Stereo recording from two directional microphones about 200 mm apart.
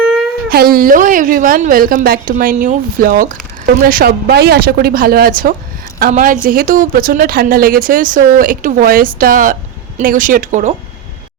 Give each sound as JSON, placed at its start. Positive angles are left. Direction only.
{"t": 0.5, "sound": "a woman's voice", "side_deg": -50}